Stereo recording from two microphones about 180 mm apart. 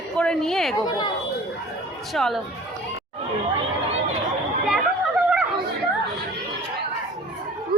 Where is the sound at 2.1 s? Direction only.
Centre (ahead or behind).